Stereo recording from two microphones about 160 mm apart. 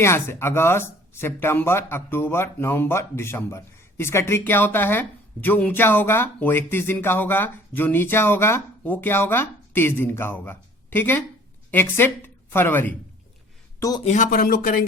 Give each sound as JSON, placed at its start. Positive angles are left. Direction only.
{"t": 0.0, "sound": "a woman's voice", "side_deg": 15}
{"t": 14.0, "sound": "speech", "side_deg": 50}